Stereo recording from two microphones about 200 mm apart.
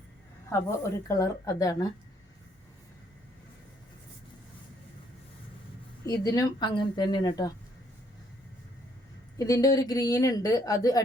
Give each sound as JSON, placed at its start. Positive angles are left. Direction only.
{"t": 0.8, "sound": "speech", "side_deg": 15}
{"t": 6.1, "sound": "a woman's voice", "side_deg": 15}
{"t": 9.4, "sound": "speech", "side_deg": 15}